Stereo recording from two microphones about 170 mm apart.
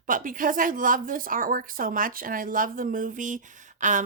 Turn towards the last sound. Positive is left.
turn(degrees=-45)  # may be behind; listen again after turning